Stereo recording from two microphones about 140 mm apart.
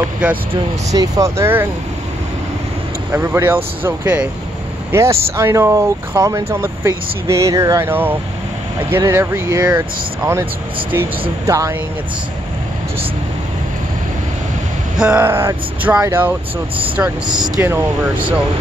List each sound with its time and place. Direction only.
0.9 s speech: 25° right (ahead or behind)
3.1 s speech: 15° right (ahead or behind)
15.0 s speech: 10° right (ahead or behind)
17.6 s speech: 15° right (ahead or behind)